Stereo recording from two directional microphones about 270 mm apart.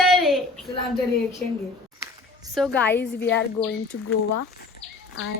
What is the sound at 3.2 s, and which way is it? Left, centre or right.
Speech, left.